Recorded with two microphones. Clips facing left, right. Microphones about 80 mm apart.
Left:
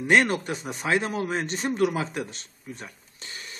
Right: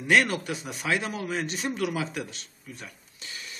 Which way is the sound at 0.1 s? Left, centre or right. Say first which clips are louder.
Left 2 dB; left.